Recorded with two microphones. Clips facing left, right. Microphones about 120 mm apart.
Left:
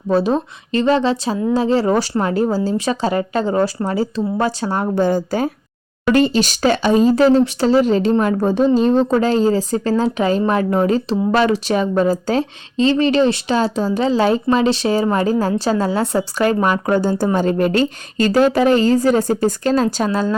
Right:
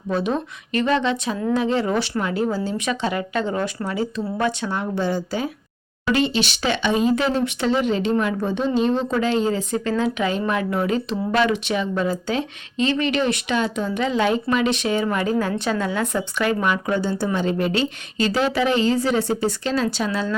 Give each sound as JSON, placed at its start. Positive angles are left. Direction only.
{"t": 0.1, "sound": "a woman's voice", "side_deg": 35}